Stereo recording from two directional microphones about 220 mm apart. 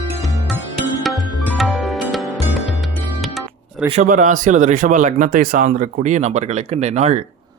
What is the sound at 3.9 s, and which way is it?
Speech, 35° right (ahead or behind).